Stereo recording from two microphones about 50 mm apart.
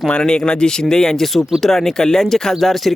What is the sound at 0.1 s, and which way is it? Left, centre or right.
Speech, centre.